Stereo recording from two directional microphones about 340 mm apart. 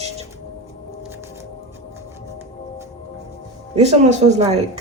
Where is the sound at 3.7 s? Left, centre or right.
Centre.